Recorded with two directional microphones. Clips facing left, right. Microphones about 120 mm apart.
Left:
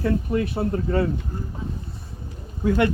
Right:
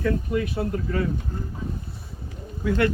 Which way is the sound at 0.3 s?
30° left (ahead or behind).